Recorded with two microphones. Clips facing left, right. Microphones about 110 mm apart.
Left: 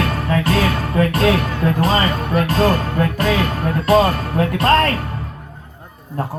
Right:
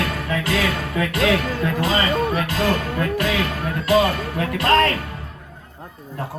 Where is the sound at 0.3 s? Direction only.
40° left (ahead or behind).